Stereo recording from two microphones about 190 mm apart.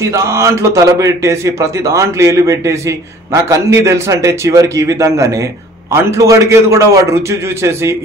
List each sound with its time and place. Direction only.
0.0 s a man's voice: 15° right (ahead or behind)